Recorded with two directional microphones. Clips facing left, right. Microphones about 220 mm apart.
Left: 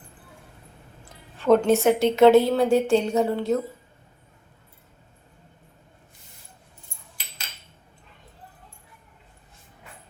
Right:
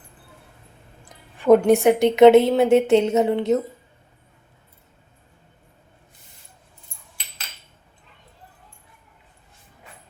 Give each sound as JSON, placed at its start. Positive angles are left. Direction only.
{"t": 1.0, "sound": "a woman's voice", "side_deg": -15}